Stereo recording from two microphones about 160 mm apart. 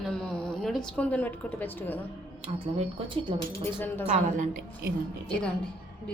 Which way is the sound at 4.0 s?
50° right (ahead or behind).